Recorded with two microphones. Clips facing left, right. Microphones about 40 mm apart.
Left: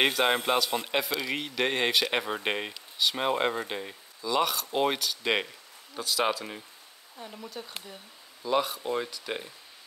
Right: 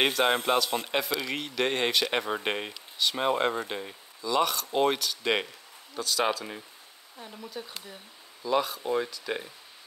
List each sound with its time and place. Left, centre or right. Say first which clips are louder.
0.0 s speech: even; centre
8.4 s speech: even; centre